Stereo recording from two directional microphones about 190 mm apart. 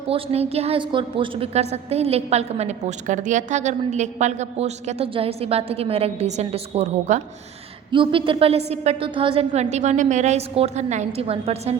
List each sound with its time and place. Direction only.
0.1 s a woman's voice: 30° right (ahead or behind)